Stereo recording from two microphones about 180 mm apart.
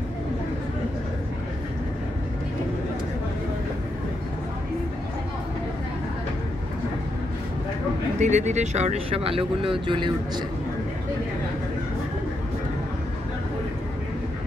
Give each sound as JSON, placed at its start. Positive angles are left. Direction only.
{"t": 8.2, "sound": "speech", "side_deg": -40}